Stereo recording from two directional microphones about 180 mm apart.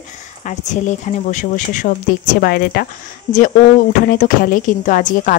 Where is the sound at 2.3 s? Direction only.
60° left (ahead or behind).